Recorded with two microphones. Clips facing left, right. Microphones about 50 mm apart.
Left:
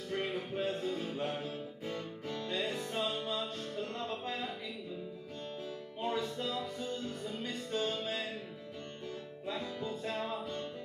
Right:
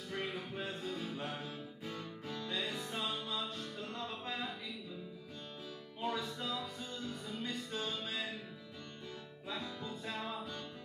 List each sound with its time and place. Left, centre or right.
0.1 s music: left
5.9 s music: left
9.8 s music: left